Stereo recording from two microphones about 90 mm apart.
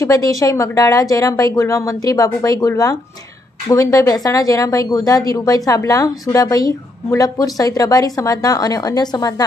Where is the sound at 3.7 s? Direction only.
40° left (ahead or behind).